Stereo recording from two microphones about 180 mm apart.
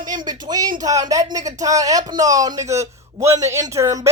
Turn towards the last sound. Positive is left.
turn(degrees=-15)  # may be behind; listen again after turning